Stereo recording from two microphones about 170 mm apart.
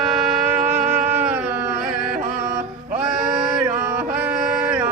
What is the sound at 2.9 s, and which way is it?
Chant, 5° right (ahead or behind).